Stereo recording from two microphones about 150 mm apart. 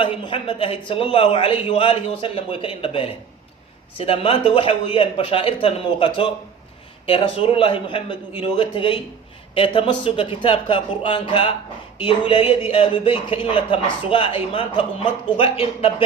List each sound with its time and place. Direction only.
0.0 s speech: 35° left (ahead or behind)